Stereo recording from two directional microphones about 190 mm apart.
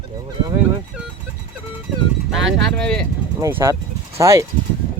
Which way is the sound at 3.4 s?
15° right (ahead or behind).